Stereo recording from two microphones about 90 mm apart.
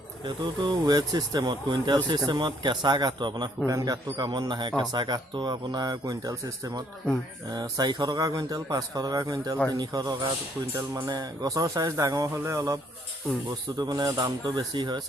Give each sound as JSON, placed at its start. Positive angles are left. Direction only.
{"t": 0.3, "sound": "speech", "side_deg": -60}
{"t": 3.7, "sound": "speech", "side_deg": -45}
{"t": 7.5, "sound": "speech", "side_deg": -50}
{"t": 10.8, "sound": "speech", "side_deg": -40}
{"t": 13.7, "sound": "speech", "side_deg": -50}